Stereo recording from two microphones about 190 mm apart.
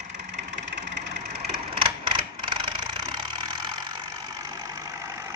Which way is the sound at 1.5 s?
25° right (ahead or behind).